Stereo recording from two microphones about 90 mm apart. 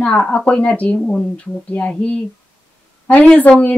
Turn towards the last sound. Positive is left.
turn(degrees=15)  # may be behind; listen again after turning